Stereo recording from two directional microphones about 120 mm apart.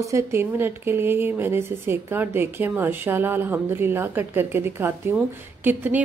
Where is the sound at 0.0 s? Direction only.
25° right (ahead or behind).